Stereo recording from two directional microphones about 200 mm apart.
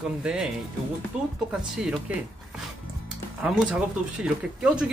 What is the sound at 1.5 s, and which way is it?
Speech, 5° right (ahead or behind).